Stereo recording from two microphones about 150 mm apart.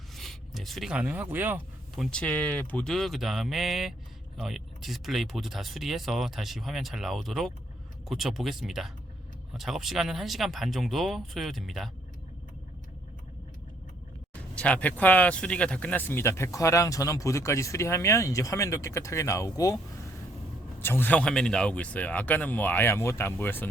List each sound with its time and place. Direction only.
0.2 s speech: centre (ahead or behind)
2.0 s speech: 5° left (ahead or behind)
14.5 s speech: 10° left (ahead or behind)
20.7 s speech: 15° left (ahead or behind)